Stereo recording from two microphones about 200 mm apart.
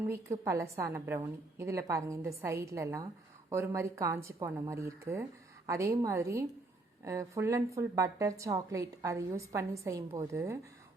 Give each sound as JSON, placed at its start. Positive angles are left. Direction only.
{"t": 0.0, "sound": "a woman's voice", "side_deg": -15}